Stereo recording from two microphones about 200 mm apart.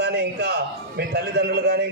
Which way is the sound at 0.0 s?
55° right (ahead or behind).